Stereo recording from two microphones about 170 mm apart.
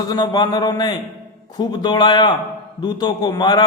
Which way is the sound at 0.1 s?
25° left (ahead or behind).